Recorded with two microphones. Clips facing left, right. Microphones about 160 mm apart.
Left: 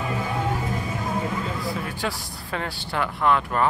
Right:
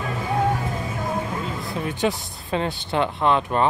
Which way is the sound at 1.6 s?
20° right (ahead or behind).